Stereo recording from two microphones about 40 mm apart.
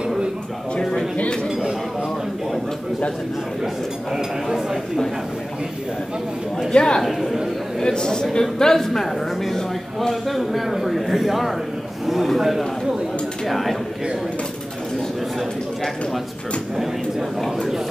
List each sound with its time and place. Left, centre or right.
6.7 s speech: left
7.0 s a man's voice: centre
7.8 s a man's voice: centre